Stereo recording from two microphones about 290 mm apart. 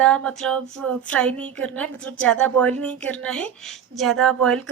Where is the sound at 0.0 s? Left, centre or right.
Centre.